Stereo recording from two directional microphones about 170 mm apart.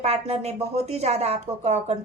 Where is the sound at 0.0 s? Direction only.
40° right (ahead or behind).